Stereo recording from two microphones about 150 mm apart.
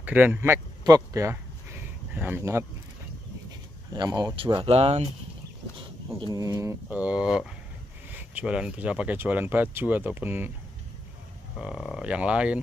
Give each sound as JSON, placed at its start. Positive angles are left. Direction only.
{"t": 0.0, "sound": "speech", "side_deg": -10}
{"t": 0.8, "sound": "a sound", "side_deg": -25}
{"t": 3.9, "sound": "speech", "side_deg": -30}
{"t": 4.6, "sound": "speech", "side_deg": -40}
{"t": 6.3, "sound": "speech", "side_deg": -20}
{"t": 11.5, "sound": "speech", "side_deg": 0}